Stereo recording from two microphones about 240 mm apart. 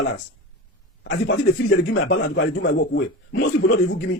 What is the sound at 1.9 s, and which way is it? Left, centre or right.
A man's voice, left.